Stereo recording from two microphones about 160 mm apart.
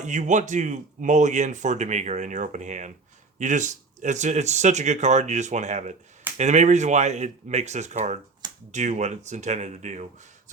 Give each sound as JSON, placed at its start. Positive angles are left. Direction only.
{"t": 0.0, "sound": "a man's voice", "side_deg": -50}